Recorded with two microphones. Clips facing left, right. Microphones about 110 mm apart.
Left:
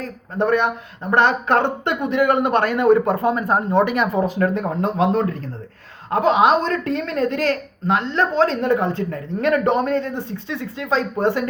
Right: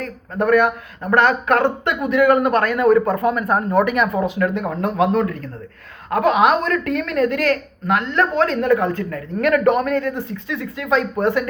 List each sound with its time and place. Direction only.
0.0 s a woman's voice: 30° left (ahead or behind)